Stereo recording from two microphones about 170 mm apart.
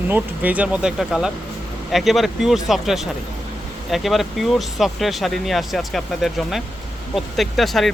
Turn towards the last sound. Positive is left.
turn(degrees=0)  # may be behind; listen again after turning